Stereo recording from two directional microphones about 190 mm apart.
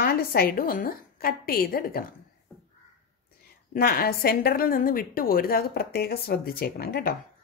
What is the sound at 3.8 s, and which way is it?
A woman's voice, 55° left (ahead or behind).